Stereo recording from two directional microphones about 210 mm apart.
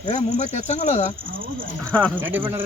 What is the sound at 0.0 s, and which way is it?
Speech, 35° left (ahead or behind).